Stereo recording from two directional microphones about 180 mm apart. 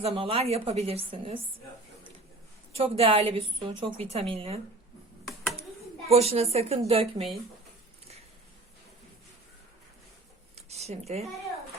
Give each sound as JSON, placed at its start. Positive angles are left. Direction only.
{"t": 0.0, "sound": "a woman's voice", "side_deg": -30}
{"t": 2.7, "sound": "a woman's voice", "side_deg": -30}
{"t": 6.1, "sound": "a woman's voice", "side_deg": -35}
{"t": 10.5, "sound": "a sound", "side_deg": -35}